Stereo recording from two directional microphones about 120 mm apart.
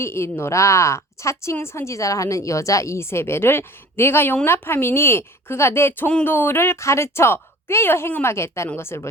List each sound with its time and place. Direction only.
0.0 s a woman's voice: 20° left (ahead or behind)